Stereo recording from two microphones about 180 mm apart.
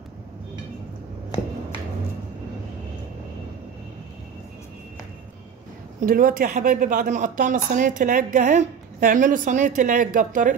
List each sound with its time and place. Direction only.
5.9 s speech: 50° right (ahead or behind)